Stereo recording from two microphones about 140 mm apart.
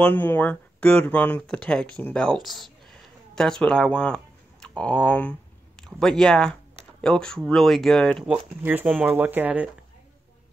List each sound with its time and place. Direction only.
0.0 s speech: 10° left (ahead or behind)
8.3 s speech: 10° right (ahead or behind)